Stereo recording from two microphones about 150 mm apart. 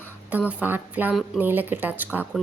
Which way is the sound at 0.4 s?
10° right (ahead or behind).